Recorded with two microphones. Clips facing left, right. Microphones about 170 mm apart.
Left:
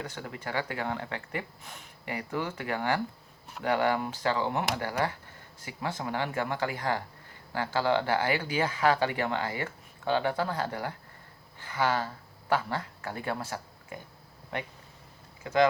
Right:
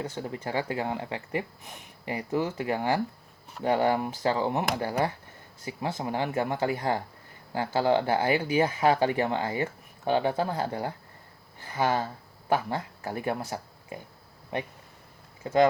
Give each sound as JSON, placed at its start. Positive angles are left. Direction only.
{"t": 0.0, "sound": "speech", "side_deg": -25}
{"t": 15.4, "sound": "speech", "side_deg": -30}